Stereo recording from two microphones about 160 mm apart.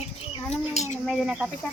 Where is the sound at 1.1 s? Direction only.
5° right (ahead or behind).